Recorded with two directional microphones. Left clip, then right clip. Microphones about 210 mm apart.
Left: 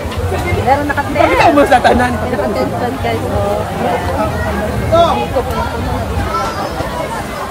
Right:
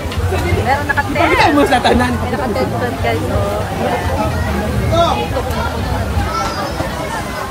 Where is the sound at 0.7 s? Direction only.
30° left (ahead or behind).